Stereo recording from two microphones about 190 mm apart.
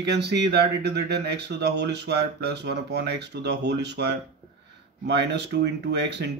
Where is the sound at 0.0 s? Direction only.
65° right (ahead or behind).